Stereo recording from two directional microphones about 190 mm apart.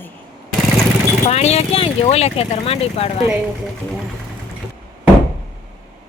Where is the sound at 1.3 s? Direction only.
35° left (ahead or behind).